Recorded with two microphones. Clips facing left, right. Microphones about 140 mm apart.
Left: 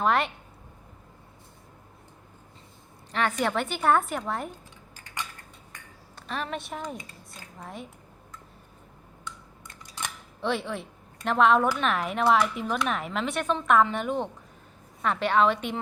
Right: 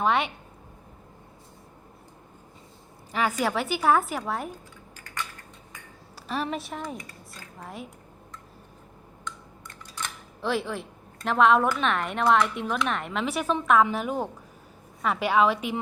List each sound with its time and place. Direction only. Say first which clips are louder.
0.0 s a woman's voice: even; centre (ahead or behind)
3.1 s a woman's voice: right 1 dB; 5° right (ahead or behind)
6.1 s speech: right 3 dB; 5° right (ahead or behind)
6.9 s speech: right 1 dB; 25° left (ahead or behind)
7.6 s a woman's voice: right 1 dB; centre (ahead or behind)
10.4 s a woman's voice: right 1 dB; centre (ahead or behind)